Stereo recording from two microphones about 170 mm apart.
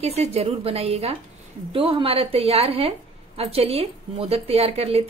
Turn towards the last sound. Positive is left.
turn(degrees=-35)  # may be behind; listen again after turning